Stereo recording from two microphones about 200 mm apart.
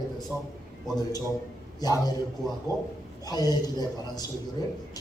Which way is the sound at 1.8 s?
20° left (ahead or behind).